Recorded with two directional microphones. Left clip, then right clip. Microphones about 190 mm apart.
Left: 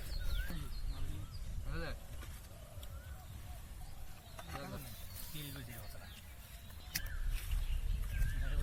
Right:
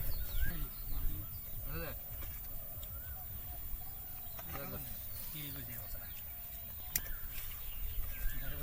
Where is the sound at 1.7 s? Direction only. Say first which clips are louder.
Even; 10° right (ahead or behind).